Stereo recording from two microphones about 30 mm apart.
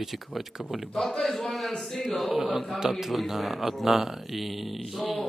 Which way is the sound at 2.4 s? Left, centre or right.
Centre.